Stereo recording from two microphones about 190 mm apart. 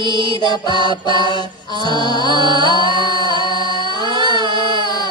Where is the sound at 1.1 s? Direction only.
20° left (ahead or behind).